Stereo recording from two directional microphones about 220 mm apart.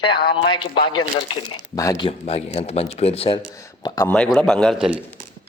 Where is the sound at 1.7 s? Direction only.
15° left (ahead or behind).